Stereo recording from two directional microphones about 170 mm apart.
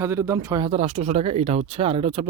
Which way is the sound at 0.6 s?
35° right (ahead or behind).